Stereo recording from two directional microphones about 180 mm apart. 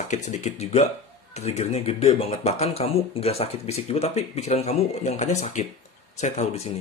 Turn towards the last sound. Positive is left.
turn(degrees=35)  # may be behind; listen again after turning